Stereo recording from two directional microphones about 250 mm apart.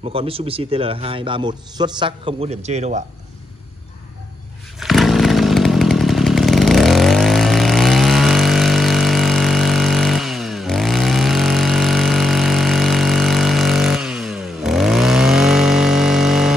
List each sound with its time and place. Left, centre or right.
0.1 s a man's voice: right
4.7 s chainsaw: centre